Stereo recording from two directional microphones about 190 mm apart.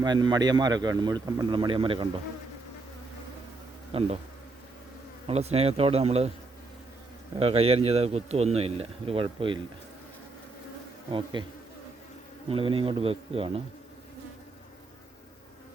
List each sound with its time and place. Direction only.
0.0 s speech: 20° right (ahead or behind)
3.9 s a man's voice: 30° right (ahead or behind)
5.2 s a man's voice: 35° right (ahead or behind)
7.3 s a man's voice: 30° right (ahead or behind)
11.1 s speech: 25° right (ahead or behind)
12.5 s speech: 30° right (ahead or behind)